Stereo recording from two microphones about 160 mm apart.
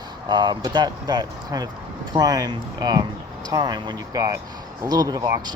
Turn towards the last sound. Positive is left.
turn(degrees=-25)  # may be behind; listen again after turning